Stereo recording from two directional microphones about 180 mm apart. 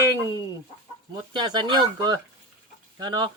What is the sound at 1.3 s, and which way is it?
Speech, 25° right (ahead or behind).